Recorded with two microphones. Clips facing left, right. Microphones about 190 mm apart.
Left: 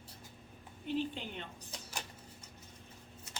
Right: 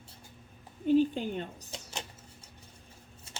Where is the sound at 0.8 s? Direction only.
45° right (ahead or behind).